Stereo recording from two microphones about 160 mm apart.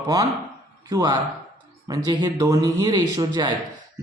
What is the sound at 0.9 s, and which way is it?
A man's voice, 25° right (ahead or behind).